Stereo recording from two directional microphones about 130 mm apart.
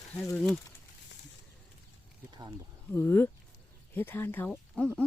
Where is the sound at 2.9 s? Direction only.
15° left (ahead or behind).